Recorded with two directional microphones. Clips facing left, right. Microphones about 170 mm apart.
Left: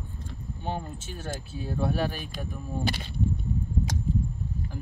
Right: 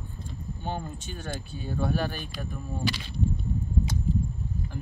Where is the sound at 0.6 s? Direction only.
Centre (ahead or behind).